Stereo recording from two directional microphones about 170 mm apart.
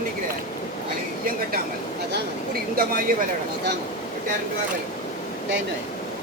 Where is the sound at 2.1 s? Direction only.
60° right (ahead or behind).